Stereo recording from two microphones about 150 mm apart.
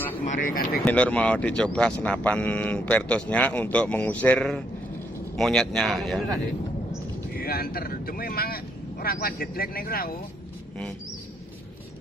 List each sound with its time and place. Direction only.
0.4 s speech: 75° left (ahead or behind)
0.8 s a man's voice: 10° left (ahead or behind)
7.3 s speech: 85° left